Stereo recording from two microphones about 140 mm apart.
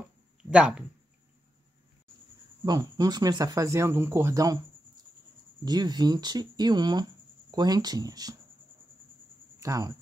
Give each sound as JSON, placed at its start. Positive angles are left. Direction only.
{"t": 0.5, "sound": "speech", "side_deg": -10}
{"t": 2.6, "sound": "speech", "side_deg": -30}
{"t": 5.7, "sound": "speech", "side_deg": -30}
{"t": 9.6, "sound": "speech", "side_deg": -25}